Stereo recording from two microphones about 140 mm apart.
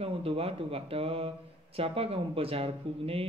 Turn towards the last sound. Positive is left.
turn(degrees=-45)  # may be behind; listen again after turning